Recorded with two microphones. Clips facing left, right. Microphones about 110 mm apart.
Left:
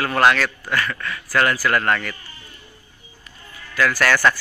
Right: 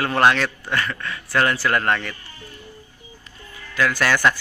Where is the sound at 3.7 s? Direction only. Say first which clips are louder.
Left 1 dB; 20° right (ahead or behind).